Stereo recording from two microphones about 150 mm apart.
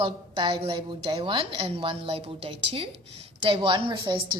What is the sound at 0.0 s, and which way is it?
A woman's voice, 35° right (ahead or behind).